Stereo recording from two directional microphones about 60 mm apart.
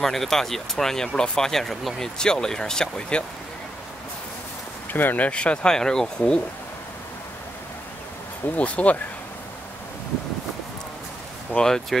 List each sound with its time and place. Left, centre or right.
0.0 s speech: centre
4.9 s speech: left; by 6.4 s centre
8.5 s speech: left
11.5 s speech: centre